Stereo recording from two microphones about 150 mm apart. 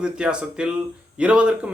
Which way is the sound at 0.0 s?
5° right (ahead or behind).